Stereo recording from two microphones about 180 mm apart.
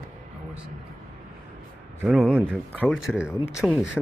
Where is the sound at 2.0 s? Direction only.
5° right (ahead or behind).